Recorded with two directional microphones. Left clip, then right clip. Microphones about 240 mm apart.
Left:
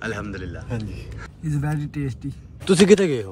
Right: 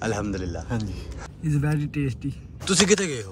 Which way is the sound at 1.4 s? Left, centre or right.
Centre.